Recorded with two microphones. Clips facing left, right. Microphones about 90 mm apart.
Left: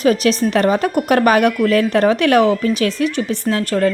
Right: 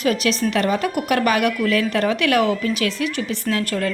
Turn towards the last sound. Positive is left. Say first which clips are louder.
# left 5 dB
turn(degrees=35)  # may be behind; listen again after turning